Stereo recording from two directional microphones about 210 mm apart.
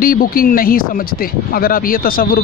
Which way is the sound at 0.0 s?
45° left (ahead or behind).